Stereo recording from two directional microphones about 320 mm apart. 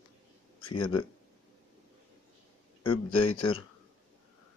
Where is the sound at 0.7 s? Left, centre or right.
Centre.